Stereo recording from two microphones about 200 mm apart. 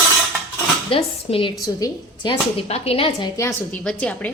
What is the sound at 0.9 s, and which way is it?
Speech, 25° left (ahead or behind).